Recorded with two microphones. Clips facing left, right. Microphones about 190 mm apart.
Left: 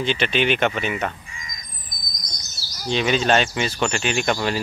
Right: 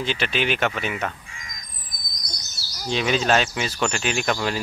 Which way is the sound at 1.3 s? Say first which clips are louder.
Left 2 dB; 65° right (ahead or behind).